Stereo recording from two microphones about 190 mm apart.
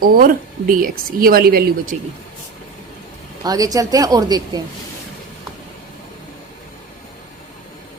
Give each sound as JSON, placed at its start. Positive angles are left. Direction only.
{"t": 0.0, "sound": "speech", "side_deg": -50}
{"t": 3.4, "sound": "a woman's voice", "side_deg": -20}